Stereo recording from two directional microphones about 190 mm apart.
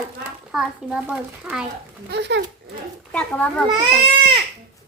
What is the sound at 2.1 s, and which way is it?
Speech, 65° right (ahead or behind).